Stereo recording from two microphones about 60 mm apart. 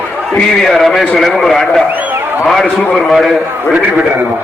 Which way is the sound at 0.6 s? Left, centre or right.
Centre.